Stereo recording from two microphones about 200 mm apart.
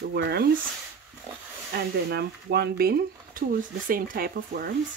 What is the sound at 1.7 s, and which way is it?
Speech, 55° right (ahead or behind).